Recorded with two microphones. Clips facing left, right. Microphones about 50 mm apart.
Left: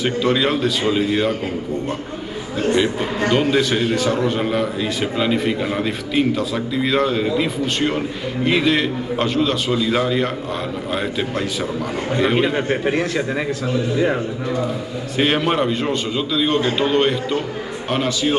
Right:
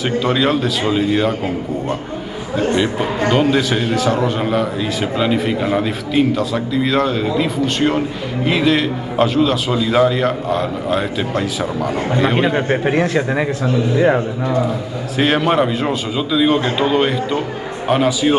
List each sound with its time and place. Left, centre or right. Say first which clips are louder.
0.0 s a man's voice: right 2 dB; centre
2.7 s a man's voice: left 1 dB; centre; by 14.2 s right
15.1 s a man's voice: right 3 dB; centre